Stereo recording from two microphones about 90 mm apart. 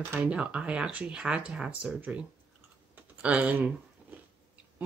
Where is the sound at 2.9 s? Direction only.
15° right (ahead or behind).